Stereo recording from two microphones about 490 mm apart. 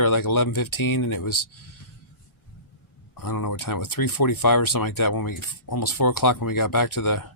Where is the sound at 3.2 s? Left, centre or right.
Left.